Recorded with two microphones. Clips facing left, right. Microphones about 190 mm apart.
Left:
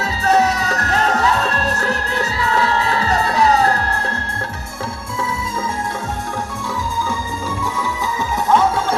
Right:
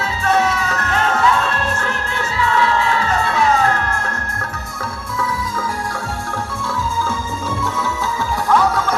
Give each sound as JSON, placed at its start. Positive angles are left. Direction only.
{"t": 0.0, "sound": "music", "side_deg": 40}
{"t": 8.4, "sound": "music", "side_deg": 25}